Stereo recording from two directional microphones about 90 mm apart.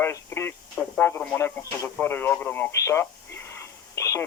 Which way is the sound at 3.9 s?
35° left (ahead or behind).